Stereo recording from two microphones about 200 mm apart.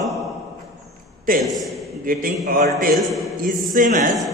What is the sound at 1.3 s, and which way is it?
A man's voice, 45° right (ahead or behind).